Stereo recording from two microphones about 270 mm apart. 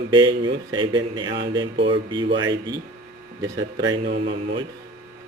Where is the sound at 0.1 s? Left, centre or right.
Centre.